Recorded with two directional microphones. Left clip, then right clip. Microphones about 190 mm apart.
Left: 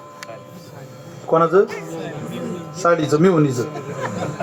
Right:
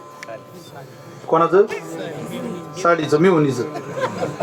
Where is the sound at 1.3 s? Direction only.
40° left (ahead or behind).